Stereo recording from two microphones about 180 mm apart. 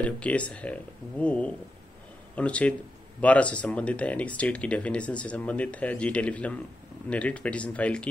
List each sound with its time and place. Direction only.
0.0 s speech: 5° left (ahead or behind)